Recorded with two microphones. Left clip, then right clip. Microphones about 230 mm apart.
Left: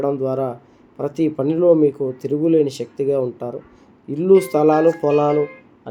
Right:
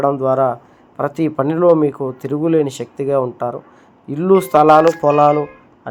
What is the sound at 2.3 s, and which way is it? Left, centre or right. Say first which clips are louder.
Speech: right 1 dB; centre.